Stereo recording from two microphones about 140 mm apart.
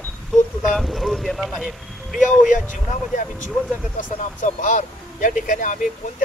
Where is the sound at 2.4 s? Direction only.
70° left (ahead or behind).